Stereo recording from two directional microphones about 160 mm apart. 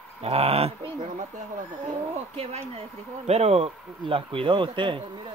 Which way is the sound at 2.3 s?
35° right (ahead or behind).